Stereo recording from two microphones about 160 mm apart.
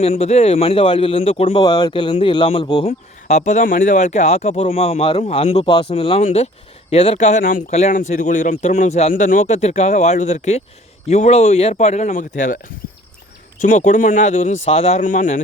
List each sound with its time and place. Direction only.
0.0 s speech: 40° left (ahead or behind)
13.6 s speech: 50° left (ahead or behind)